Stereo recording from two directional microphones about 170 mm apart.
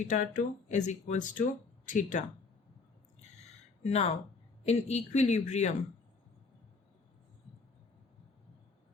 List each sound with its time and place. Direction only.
0.1 s speech: 50° left (ahead or behind)
3.8 s speech: 40° left (ahead or behind)